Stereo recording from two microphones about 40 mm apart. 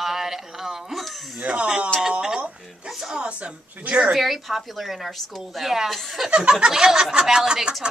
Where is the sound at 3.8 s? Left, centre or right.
Right.